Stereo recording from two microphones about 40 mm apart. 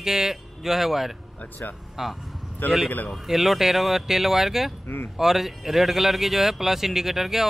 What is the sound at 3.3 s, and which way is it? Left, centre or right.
Speech, centre.